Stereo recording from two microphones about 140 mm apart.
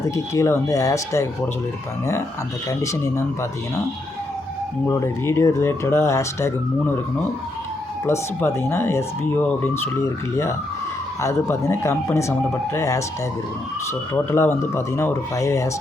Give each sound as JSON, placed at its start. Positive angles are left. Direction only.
{"t": 0.1, "sound": "speech", "side_deg": 20}
{"t": 2.6, "sound": "speech", "side_deg": 20}
{"t": 4.9, "sound": "speech", "side_deg": 20}
{"t": 8.0, "sound": "speech", "side_deg": 20}
{"t": 14.1, "sound": "speech", "side_deg": 20}